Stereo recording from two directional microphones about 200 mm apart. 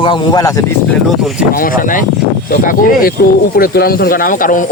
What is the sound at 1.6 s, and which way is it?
Speech, 45° left (ahead or behind).